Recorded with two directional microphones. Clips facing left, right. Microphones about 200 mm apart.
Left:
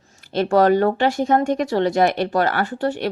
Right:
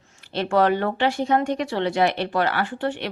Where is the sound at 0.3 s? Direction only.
40° left (ahead or behind).